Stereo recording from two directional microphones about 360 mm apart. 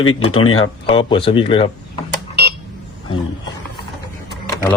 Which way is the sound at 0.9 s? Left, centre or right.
Centre.